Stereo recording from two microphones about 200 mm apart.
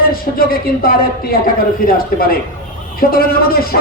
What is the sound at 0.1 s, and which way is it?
Music, 45° left (ahead or behind).